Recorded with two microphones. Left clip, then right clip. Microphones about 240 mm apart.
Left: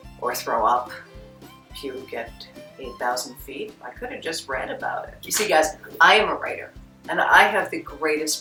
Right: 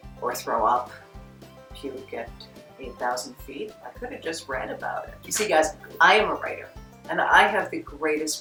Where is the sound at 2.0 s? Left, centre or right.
Centre.